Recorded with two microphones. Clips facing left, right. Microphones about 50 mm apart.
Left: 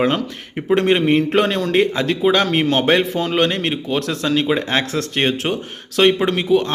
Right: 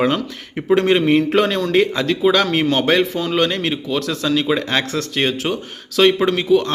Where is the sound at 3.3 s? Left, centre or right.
Left.